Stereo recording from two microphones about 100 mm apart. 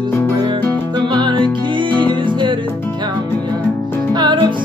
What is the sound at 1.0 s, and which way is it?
Music, 50° right (ahead or behind).